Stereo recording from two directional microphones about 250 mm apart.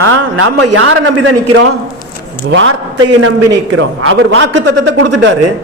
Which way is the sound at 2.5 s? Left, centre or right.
Right.